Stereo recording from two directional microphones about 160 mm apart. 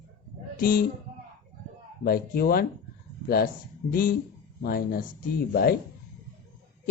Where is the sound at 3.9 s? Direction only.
65° left (ahead or behind).